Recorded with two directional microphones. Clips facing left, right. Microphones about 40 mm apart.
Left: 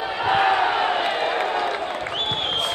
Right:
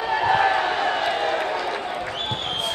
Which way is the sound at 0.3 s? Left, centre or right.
Left.